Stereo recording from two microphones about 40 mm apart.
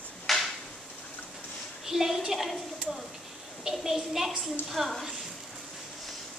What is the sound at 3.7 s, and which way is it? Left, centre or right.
A woman's voice, centre.